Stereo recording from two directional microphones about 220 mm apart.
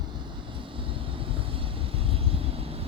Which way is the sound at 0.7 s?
25° right (ahead or behind).